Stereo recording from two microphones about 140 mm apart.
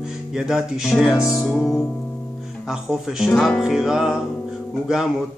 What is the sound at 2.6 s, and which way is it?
Music, 5° right (ahead or behind).